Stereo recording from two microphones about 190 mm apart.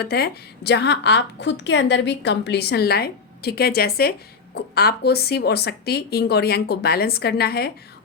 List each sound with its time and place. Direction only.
0.0 s a woman's voice: 60° left (ahead or behind)